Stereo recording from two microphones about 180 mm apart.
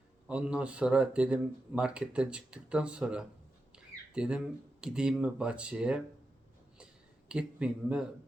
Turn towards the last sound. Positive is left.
turn(degrees=-5)  # may be behind; listen again after turning